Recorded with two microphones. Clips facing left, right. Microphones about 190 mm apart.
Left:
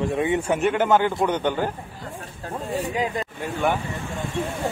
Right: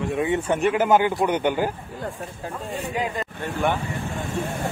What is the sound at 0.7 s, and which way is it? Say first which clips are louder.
A man's voice: right 2 dB; 10° right (ahead or behind).